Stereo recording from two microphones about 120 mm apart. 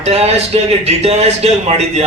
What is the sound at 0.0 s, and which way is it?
Speech, 60° right (ahead or behind).